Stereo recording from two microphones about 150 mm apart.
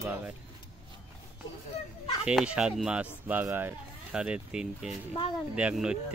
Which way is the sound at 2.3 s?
5° right (ahead or behind).